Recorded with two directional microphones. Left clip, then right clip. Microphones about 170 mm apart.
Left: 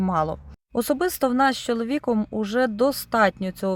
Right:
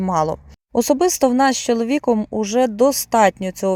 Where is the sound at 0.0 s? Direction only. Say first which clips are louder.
Right 5 dB; 20° right (ahead or behind).